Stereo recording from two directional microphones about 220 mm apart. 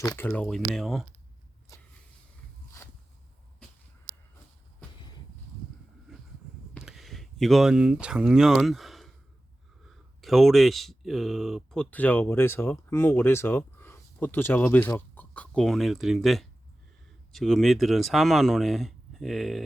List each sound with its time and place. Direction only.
0.0 s speech: 15° left (ahead or behind)
0.3 s speech: 5° left (ahead or behind)
6.1 s a sound: centre (ahead or behind)
8.0 s speech: 5° right (ahead or behind)